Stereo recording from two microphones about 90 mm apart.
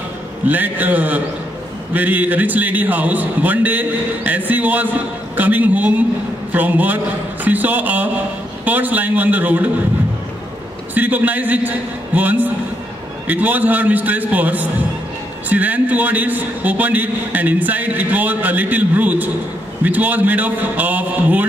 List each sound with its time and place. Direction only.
0.5 s a man's voice: 20° right (ahead or behind)
11.0 s a man's voice: 20° right (ahead or behind)